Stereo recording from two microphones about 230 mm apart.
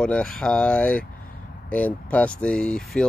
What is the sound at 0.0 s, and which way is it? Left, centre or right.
Speech, centre.